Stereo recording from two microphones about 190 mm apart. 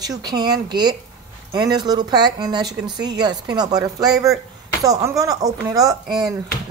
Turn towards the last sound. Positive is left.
turn(degrees=-20)  # may be behind; listen again after turning